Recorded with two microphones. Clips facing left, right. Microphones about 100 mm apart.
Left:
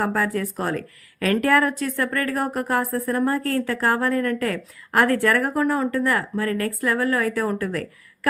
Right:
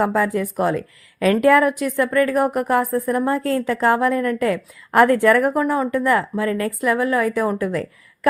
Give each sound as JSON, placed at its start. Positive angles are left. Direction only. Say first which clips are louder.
{"t": 0.0, "sound": "a woman's voice", "louder": "right 4 dB", "side_deg": -20}